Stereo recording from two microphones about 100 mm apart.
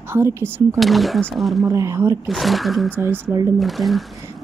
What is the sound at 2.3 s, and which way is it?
Speech, centre (ahead or behind).